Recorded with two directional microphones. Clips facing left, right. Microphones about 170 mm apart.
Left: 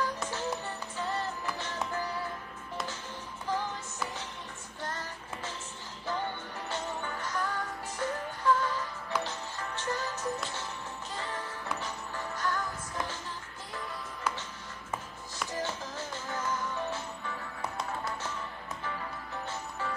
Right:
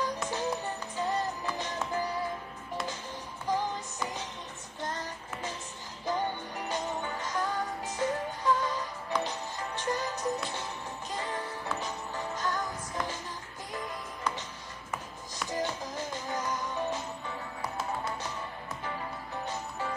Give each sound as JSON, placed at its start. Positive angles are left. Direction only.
{"t": 0.0, "sound": "music", "side_deg": -15}
{"t": 3.4, "sound": "music", "side_deg": -15}
{"t": 15.5, "sound": "music", "side_deg": -15}
{"t": 18.9, "sound": "music", "side_deg": -15}